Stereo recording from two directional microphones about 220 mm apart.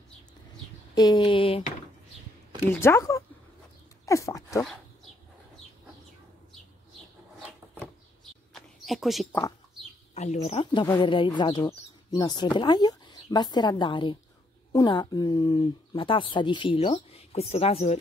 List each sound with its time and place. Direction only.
0.9 s speech: 20° left (ahead or behind)
2.7 s speech: 10° left (ahead or behind)
8.5 s a sound: centre (ahead or behind)
10.1 s speech: 30° left (ahead or behind)